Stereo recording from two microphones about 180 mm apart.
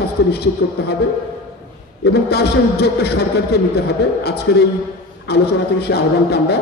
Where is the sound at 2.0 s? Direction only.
65° left (ahead or behind).